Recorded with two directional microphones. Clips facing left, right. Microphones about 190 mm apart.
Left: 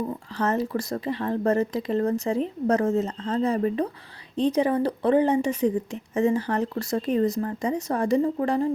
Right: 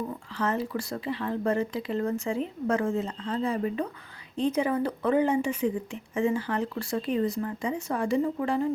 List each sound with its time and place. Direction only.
0.3 s speech: 40° left (ahead or behind)